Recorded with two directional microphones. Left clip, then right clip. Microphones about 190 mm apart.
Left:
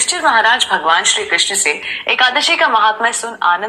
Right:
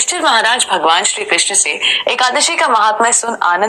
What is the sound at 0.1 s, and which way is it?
A woman's voice, 40° right (ahead or behind).